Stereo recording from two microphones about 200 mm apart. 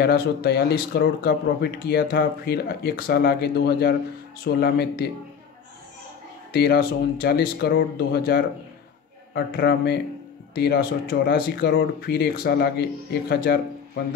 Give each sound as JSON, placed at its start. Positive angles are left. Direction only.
{"t": 0.0, "sound": "speech", "side_deg": 50}
{"t": 6.5, "sound": "a man's voice", "side_deg": 55}